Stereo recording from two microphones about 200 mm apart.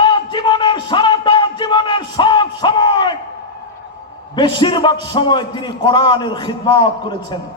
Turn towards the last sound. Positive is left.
turn(degrees=20)  # may be behind; listen again after turning